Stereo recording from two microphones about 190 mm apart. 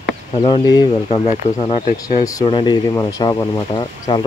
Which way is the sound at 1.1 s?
30° left (ahead or behind).